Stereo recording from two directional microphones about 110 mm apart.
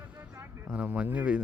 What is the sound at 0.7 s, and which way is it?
Speech, 10° right (ahead or behind).